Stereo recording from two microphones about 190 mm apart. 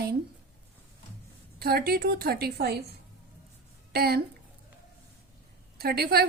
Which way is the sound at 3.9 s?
55° right (ahead or behind).